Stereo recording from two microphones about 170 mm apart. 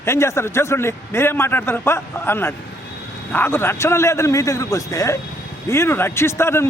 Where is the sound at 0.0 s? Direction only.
15° left (ahead or behind).